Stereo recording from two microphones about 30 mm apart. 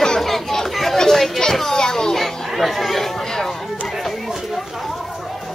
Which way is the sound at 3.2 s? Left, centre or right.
Centre.